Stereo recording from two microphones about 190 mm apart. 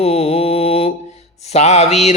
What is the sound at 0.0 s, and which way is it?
Mantra, 30° left (ahead or behind).